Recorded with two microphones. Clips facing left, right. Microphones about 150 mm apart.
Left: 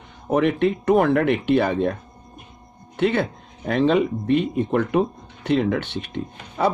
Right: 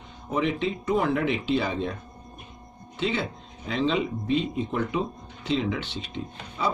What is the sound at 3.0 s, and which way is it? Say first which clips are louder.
Speech: left 7 dB; 55° left (ahead or behind).